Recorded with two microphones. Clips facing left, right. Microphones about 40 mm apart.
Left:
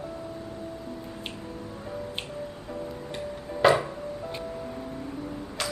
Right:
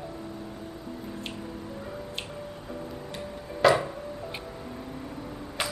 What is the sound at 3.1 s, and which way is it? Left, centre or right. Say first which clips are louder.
Music: left 3 dB; centre.